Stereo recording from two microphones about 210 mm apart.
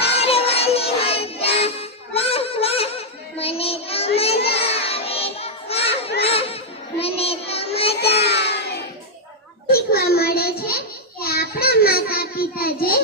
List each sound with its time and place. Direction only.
0.0 s music: 30° left (ahead or behind)
4.4 s child singing: 30° left (ahead or behind)
6.2 s music: 30° left (ahead or behind)
7.0 s child singing: 30° left (ahead or behind)
7.9 s child singing: 50° left (ahead or behind)
10.6 s a sound: 45° left (ahead or behind)